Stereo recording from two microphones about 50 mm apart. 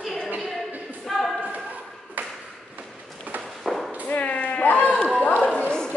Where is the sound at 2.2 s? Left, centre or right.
Right.